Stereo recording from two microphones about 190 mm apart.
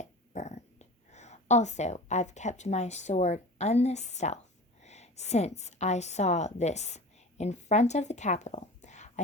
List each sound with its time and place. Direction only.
0.0 s a woman's voice: 35° left (ahead or behind)